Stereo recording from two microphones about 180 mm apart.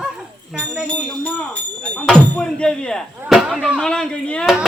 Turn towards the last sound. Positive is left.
turn(degrees=5)  # may be behind; listen again after turning